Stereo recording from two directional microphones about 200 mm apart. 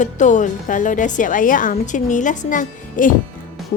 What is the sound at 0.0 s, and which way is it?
A woman's voice, 40° left (ahead or behind).